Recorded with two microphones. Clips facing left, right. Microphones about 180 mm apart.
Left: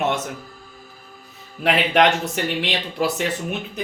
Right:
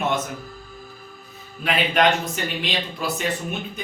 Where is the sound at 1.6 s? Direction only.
75° left (ahead or behind).